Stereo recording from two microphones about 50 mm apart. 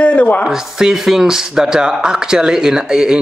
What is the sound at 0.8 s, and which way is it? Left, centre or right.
Speech, centre.